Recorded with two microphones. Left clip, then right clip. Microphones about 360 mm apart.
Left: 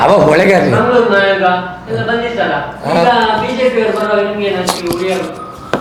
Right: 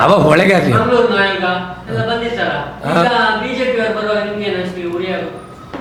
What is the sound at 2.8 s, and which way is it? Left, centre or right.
Speech, right.